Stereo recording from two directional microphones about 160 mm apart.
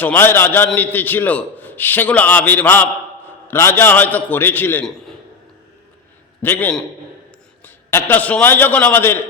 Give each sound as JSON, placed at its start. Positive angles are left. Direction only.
{"t": 0.0, "sound": "a man's voice", "side_deg": 10}
{"t": 6.4, "sound": "a man's voice", "side_deg": 10}